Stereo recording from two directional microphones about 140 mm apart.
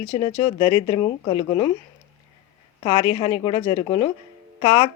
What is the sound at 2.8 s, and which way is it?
Speech, 35° left (ahead or behind).